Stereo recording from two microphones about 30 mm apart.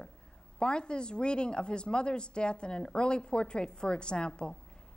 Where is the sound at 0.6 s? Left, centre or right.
Left.